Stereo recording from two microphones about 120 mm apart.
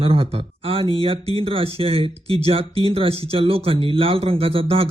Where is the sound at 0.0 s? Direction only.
50° right (ahead or behind).